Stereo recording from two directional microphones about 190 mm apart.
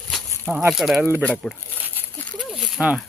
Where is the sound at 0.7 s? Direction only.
Centre (ahead or behind).